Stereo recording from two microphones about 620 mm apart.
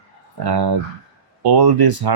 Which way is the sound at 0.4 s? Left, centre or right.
Right.